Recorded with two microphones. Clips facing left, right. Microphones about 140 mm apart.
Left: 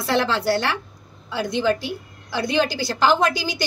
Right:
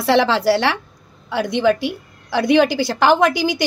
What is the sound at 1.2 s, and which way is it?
A woman's voice, 75° right (ahead or behind).